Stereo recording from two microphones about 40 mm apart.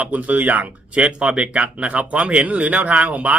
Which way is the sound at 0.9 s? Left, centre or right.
Right.